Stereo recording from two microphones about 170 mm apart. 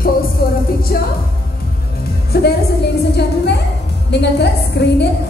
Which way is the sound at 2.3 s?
75° left (ahead or behind).